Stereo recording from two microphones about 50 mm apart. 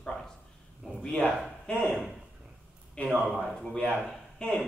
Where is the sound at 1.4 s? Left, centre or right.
Centre.